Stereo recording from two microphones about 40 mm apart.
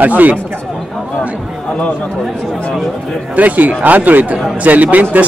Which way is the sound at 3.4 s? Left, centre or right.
Right.